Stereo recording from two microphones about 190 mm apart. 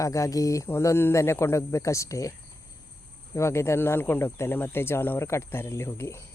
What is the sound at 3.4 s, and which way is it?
Speech, 15° left (ahead or behind).